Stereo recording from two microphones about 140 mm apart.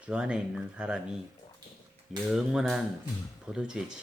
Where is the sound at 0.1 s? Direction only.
5° right (ahead or behind).